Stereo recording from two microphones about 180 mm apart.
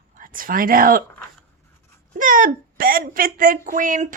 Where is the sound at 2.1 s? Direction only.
50° right (ahead or behind).